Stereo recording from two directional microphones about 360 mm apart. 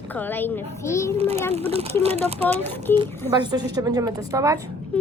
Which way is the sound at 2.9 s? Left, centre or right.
Centre.